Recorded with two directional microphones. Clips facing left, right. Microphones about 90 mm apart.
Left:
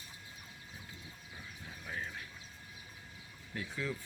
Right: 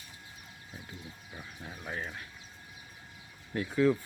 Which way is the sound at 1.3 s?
50° right (ahead or behind).